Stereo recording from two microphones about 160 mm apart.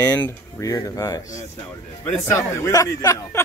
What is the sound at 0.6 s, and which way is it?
Speech, 20° left (ahead or behind).